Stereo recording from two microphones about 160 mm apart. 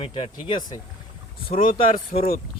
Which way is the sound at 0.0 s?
35° left (ahead or behind).